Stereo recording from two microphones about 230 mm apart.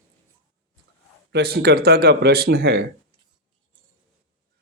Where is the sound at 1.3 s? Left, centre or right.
Right.